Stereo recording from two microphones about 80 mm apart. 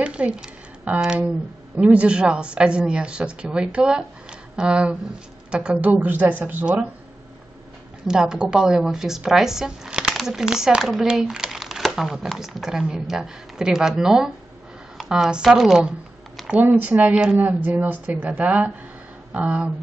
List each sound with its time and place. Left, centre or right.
0.0 s a woman's voice: centre
8.1 s speech: centre
16.6 s a woman's voice: right